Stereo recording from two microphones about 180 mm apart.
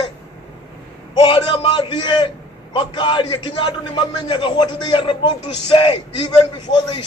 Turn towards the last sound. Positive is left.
turn(degrees=25)  # may be behind; listen again after turning